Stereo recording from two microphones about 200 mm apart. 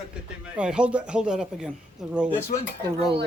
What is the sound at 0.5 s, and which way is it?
A man's voice, 5° right (ahead or behind).